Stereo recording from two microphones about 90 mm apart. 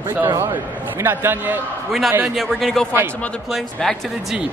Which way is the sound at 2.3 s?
Centre (ahead or behind).